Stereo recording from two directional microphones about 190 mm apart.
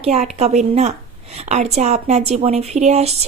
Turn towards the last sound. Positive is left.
turn(degrees=-35)  # may be behind; listen again after turning